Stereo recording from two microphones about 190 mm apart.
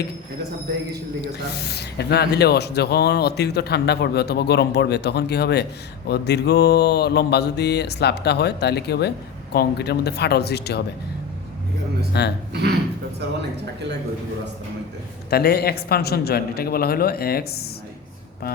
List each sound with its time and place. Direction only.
1.4 s mantra: 60° left (ahead or behind)
12.1 s mantra: 60° left (ahead or behind)
15.3 s mantra: 55° left (ahead or behind)